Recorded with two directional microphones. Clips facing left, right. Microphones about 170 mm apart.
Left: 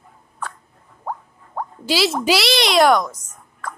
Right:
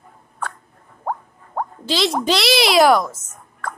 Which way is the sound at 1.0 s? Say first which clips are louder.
Right 3 dB; 55° right (ahead or behind).